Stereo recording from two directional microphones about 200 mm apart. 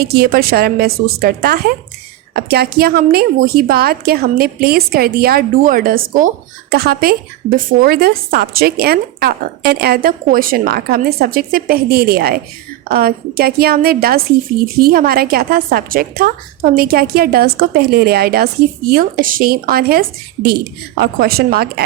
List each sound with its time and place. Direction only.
0.0 s a woman's voice: 50° right (ahead or behind)